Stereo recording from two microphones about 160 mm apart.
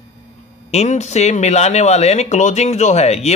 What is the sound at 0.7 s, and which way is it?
Speech, 45° left (ahead or behind).